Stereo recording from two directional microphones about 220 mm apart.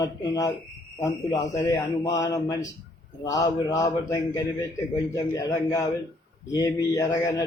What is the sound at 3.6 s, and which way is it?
A man's voice, 15° left (ahead or behind).